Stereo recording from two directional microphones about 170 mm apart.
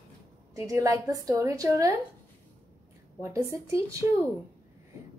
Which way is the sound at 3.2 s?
15° right (ahead or behind).